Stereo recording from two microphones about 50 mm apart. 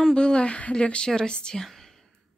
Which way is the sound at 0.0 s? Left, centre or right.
Centre.